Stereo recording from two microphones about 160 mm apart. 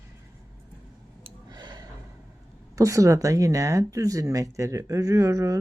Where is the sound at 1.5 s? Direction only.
25° right (ahead or behind).